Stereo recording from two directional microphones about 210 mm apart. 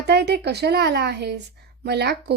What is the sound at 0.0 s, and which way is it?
A woman's voice, 50° right (ahead or behind).